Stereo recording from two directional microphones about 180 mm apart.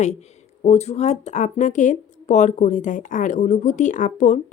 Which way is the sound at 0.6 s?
35° left (ahead or behind).